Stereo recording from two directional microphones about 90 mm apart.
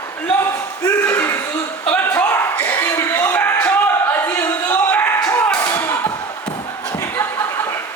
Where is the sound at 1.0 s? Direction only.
30° left (ahead or behind).